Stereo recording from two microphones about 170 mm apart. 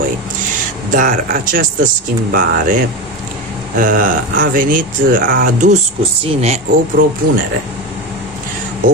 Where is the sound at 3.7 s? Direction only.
55° right (ahead or behind).